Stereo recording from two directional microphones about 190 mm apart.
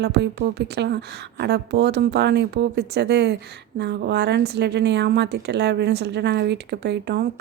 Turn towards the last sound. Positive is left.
turn(degrees=-55)  # may be behind; listen again after turning